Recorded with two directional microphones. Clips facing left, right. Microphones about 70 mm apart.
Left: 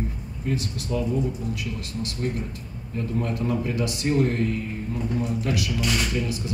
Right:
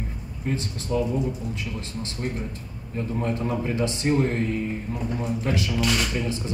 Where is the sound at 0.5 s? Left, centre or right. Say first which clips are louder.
Even; right.